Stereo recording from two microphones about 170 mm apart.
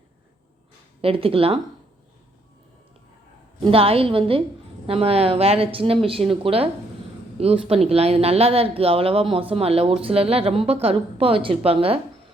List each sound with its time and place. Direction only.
1.0 s a woman's voice: 35° right (ahead or behind)
3.6 s a woman's voice: 35° right (ahead or behind)